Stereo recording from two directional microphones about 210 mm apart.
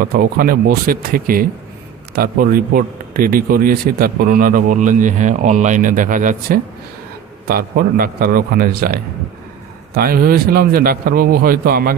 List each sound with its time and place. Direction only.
0.0 s a man's voice: 45° right (ahead or behind)